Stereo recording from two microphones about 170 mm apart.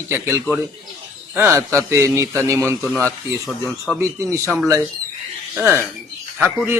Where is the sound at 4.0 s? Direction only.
15° right (ahead or behind).